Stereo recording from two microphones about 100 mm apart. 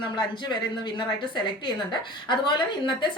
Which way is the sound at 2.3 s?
50° left (ahead or behind).